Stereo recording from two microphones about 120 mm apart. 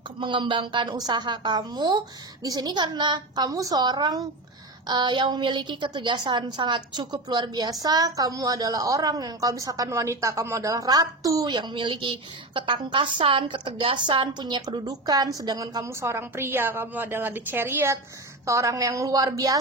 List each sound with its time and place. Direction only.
0.2 s a woman's voice: 45° right (ahead or behind)
11.5 s a woman's voice: 40° right (ahead or behind)